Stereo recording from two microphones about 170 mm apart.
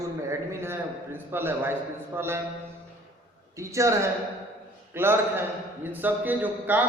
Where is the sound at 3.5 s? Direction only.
20° right (ahead or behind).